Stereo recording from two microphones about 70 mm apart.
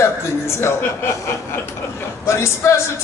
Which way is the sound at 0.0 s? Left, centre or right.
Left.